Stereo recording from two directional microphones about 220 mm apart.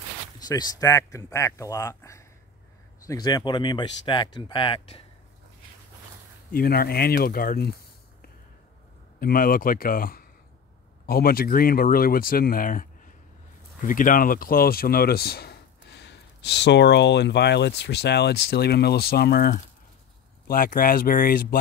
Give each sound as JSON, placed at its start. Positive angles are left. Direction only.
{"t": 0.4, "sound": "speech", "side_deg": 15}
{"t": 6.5, "sound": "speech", "side_deg": 45}
{"t": 9.2, "sound": "speech", "side_deg": 40}